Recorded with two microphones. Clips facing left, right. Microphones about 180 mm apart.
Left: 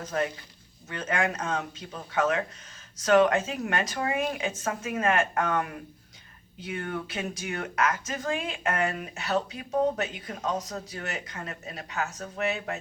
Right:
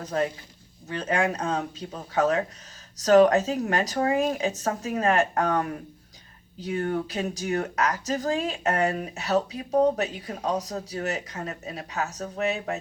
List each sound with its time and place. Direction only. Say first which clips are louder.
0.0 s speech: right 3 dB; 35° right (ahead or behind)